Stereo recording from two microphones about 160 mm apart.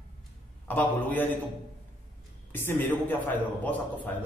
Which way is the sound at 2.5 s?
15° left (ahead or behind).